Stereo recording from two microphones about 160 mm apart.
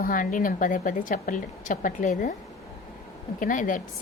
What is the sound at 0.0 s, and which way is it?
A woman's voice, 55° left (ahead or behind).